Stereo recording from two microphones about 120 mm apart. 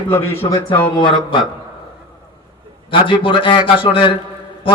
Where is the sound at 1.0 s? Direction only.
45° left (ahead or behind).